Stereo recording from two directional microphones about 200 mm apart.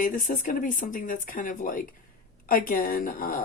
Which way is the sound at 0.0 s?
40° left (ahead or behind).